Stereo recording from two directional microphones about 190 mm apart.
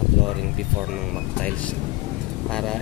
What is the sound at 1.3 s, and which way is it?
Speech, 5° left (ahead or behind).